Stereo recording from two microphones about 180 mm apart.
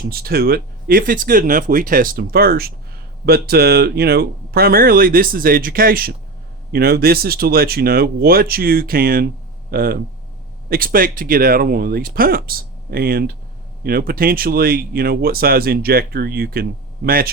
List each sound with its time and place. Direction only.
0.1 s speech: 55° right (ahead or behind)